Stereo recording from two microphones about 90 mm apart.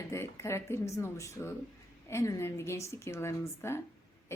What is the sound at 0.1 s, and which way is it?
A woman's voice, 30° left (ahead or behind).